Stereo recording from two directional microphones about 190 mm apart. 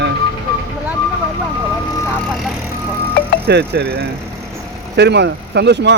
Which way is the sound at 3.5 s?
60° right (ahead or behind).